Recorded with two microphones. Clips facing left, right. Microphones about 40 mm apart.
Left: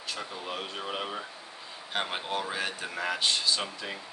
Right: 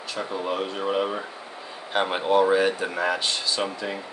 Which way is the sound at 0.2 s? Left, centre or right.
Right.